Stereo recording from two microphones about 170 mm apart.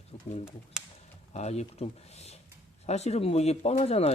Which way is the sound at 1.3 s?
40° left (ahead or behind).